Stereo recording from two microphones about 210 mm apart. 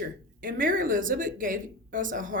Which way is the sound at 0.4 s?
40° right (ahead or behind).